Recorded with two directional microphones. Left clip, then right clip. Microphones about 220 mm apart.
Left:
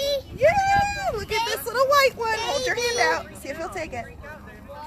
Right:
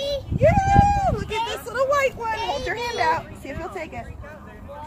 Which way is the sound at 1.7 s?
25° left (ahead or behind).